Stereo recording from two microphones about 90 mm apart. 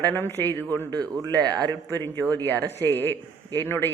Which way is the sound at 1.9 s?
25° left (ahead or behind).